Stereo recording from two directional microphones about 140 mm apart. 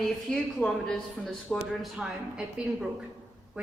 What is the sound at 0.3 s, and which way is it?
Speech, 5° left (ahead or behind).